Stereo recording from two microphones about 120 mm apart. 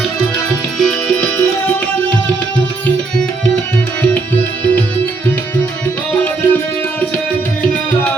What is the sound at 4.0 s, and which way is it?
Tabla, 15° left (ahead or behind).